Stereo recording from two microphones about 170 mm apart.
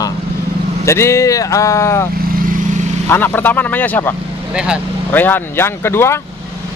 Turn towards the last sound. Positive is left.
turn(degrees=15)  # may be behind; listen again after turning